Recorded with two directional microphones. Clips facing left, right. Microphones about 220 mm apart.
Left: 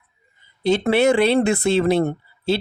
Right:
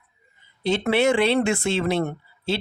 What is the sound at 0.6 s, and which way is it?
Speech, 40° left (ahead or behind).